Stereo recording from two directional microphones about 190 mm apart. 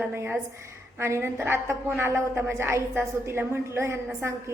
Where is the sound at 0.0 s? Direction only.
10° right (ahead or behind).